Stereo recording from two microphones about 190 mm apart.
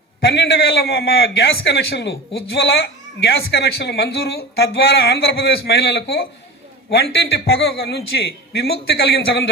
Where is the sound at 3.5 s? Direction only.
60° left (ahead or behind).